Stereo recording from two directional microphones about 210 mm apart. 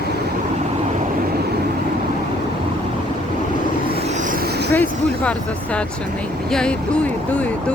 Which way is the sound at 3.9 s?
35° right (ahead or behind).